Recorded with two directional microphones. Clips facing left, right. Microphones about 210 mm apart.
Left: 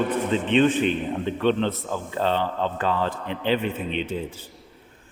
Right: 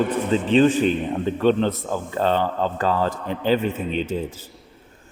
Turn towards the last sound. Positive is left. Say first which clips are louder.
# right 3 dB
turn(degrees=-40)  # may be behind; listen again after turning